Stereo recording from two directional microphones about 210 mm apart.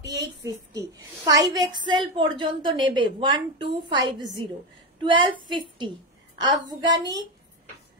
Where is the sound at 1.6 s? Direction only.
20° right (ahead or behind).